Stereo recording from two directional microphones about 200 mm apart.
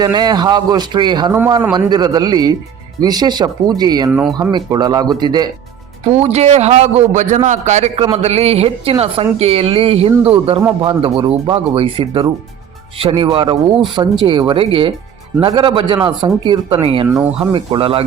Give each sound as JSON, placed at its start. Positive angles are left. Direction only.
{"t": 0.0, "sound": "a woman's voice", "side_deg": -20}
{"t": 4.1, "sound": "speech", "side_deg": -5}
{"t": 4.4, "sound": "a woman's voice", "side_deg": -20}
{"t": 6.1, "sound": "a man's voice", "side_deg": -35}
{"t": 16.8, "sound": "a woman's voice", "side_deg": -25}